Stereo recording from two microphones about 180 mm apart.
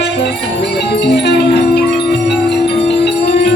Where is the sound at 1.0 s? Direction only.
70° left (ahead or behind).